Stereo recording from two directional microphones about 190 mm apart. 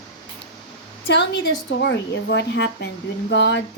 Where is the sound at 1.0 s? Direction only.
65° left (ahead or behind).